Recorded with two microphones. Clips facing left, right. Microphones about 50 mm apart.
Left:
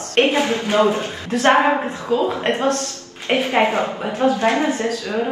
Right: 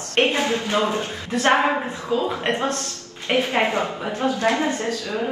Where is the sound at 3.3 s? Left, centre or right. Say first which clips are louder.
Left 3 dB; left.